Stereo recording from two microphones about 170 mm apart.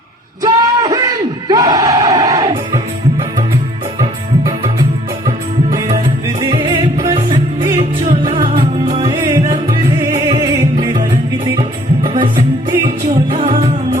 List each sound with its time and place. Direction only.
0.4 s a sound: 20° right (ahead or behind)
4.0 s music: 30° right (ahead or behind)
6.2 s music: 25° right (ahead or behind)